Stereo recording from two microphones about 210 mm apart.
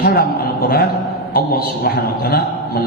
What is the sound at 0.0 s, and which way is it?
Speech, 45° left (ahead or behind).